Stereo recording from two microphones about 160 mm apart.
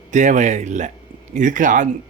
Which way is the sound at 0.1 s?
50° right (ahead or behind).